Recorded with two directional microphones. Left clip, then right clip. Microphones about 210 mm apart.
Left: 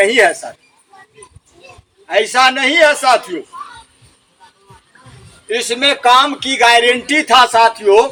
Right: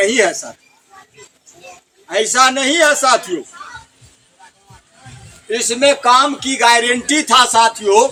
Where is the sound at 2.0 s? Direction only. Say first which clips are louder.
Left 1 dB; 60° right (ahead or behind).